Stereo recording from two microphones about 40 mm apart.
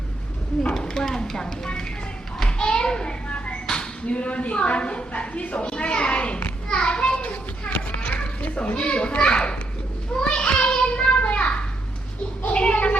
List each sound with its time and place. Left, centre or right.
0.7 s speech: centre
2.5 s a sound: left
4.0 s a woman's voice: left
8.2 s children playing: left
8.8 s a child's voice: left
10.2 s children playing: left
12.5 s speech: left